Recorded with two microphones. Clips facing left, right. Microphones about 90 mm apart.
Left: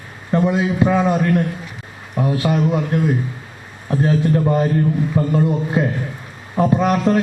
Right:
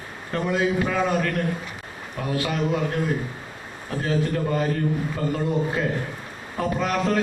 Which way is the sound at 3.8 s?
30° left (ahead or behind).